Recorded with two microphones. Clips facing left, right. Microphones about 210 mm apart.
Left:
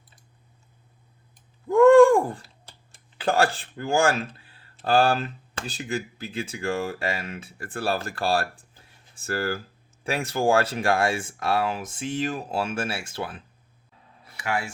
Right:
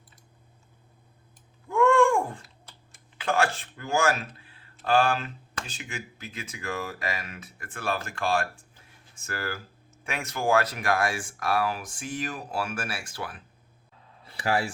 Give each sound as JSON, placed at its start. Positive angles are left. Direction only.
{"t": 1.7, "sound": "typing", "side_deg": 35}
{"t": 4.8, "sound": "speech", "side_deg": 35}
{"t": 14.3, "sound": "a sound", "side_deg": -35}